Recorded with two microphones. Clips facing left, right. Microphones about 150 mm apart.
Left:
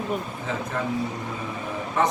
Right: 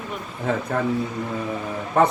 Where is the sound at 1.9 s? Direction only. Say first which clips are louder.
Right 5 dB; 55° right (ahead or behind).